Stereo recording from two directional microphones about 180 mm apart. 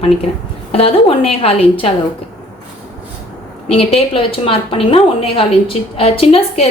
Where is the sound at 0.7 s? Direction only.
30° left (ahead or behind).